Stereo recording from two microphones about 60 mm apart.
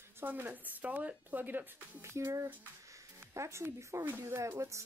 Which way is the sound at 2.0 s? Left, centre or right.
Right.